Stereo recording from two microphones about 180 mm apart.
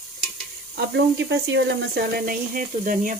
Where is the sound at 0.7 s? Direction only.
70° right (ahead or behind); by 3.2 s 45° right (ahead or behind).